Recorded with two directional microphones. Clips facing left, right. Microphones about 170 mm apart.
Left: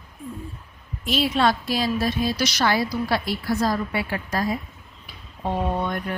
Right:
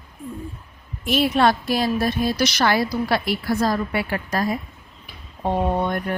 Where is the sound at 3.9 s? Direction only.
55° right (ahead or behind).